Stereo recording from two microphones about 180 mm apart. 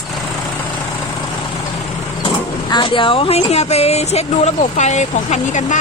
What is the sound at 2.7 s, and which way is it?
Speech, 25° left (ahead or behind).